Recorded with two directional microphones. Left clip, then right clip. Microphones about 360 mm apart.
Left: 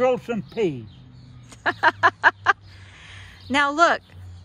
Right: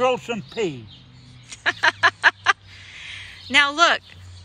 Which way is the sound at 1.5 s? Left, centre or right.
Centre.